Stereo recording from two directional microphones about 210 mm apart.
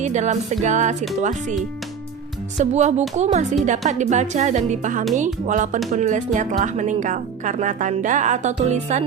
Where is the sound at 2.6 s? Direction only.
35° right (ahead or behind).